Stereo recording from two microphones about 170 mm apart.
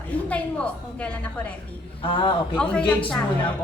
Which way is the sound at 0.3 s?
5° left (ahead or behind).